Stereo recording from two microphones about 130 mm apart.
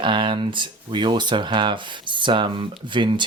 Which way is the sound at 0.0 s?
40° right (ahead or behind).